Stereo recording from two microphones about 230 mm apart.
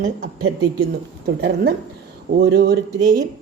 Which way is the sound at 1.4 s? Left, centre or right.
Right.